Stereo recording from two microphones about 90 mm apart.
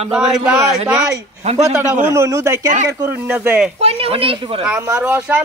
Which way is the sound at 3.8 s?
90° right.